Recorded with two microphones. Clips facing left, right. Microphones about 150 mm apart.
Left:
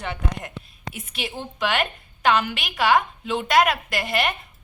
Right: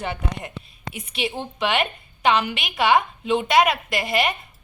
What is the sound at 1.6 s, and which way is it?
A woman's voice, centre (ahead or behind).